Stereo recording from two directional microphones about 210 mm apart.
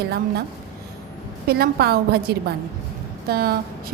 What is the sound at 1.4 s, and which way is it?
A woman's voice, 50° right (ahead or behind).